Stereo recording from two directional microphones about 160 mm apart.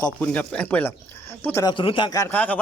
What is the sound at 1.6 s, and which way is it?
Speech, 30° left (ahead or behind).